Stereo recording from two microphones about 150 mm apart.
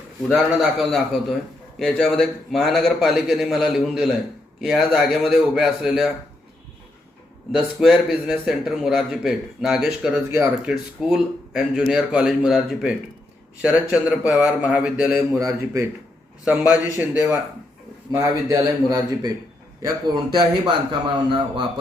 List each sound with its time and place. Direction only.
0.3 s a man's voice: centre (ahead or behind)
7.5 s a man's voice: centre (ahead or behind)
13.9 s a man's voice: 10° right (ahead or behind)
15.4 s a man's voice: 20° right (ahead or behind)
16.4 s a man's voice: 10° right (ahead or behind); by 19.3 s 25° right (ahead or behind)
20.4 s a man's voice: 30° right (ahead or behind)